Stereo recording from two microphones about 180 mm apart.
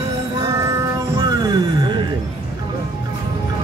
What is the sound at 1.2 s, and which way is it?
Music, 20° right (ahead or behind).